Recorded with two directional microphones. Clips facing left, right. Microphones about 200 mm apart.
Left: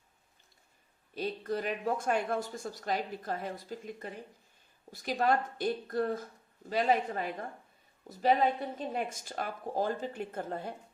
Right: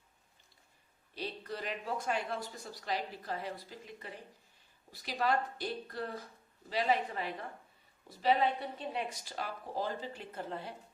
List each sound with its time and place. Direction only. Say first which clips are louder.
1.1 s speech: left 7 dB; 50° left (ahead or behind)